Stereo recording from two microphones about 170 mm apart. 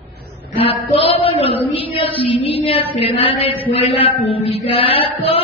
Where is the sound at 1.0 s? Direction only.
35° left (ahead or behind).